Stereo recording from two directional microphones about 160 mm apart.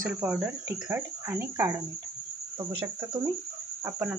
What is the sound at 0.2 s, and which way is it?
Speech, 10° right (ahead or behind).